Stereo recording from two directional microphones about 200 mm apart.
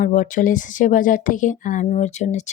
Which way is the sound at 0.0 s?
40° left (ahead or behind).